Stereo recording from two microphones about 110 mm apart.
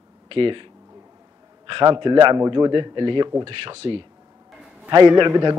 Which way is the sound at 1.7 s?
45° right (ahead or behind).